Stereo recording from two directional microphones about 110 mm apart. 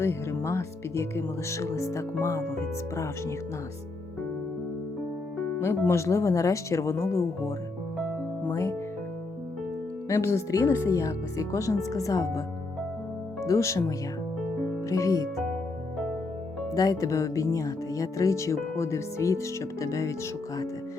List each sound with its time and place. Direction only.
0.0 s speech: 25° left (ahead or behind)
5.5 s speech: 20° left (ahead or behind)
8.4 s speech: 25° left (ahead or behind)
10.1 s speech: 25° left (ahead or behind)
13.4 s speech: 30° left (ahead or behind)
16.7 s speech: 30° left (ahead or behind)